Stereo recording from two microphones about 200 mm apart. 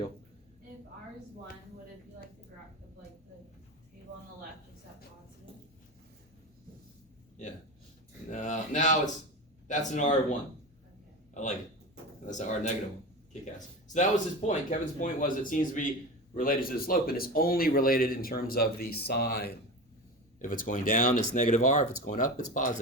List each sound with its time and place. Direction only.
7.4 s a sound: 35° left (ahead or behind)
9.6 s speech: 40° left (ahead or behind)
12.2 s speech: 40° left (ahead or behind)